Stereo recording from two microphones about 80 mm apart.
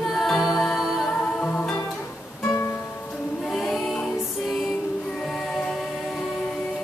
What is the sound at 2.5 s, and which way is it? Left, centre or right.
Music, left.